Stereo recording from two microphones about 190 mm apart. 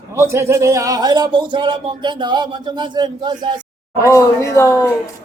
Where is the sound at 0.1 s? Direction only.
15° right (ahead or behind).